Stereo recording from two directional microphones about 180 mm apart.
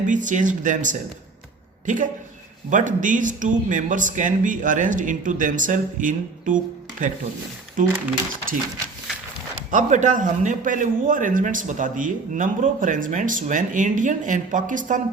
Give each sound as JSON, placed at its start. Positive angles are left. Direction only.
{"t": 0.0, "sound": "a man's voice", "side_deg": -45}
{"t": 2.6, "sound": "a man's voice", "side_deg": -45}
{"t": 9.7, "sound": "a man's voice", "side_deg": -45}